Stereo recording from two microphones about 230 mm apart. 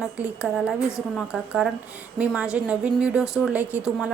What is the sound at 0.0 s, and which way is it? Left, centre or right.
A woman's voice, centre.